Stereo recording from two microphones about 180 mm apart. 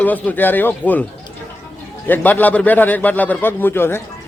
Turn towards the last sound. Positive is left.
turn(degrees=10)  # may be behind; listen again after turning